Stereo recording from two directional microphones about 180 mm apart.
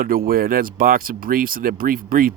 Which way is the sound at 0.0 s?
55° right (ahead or behind).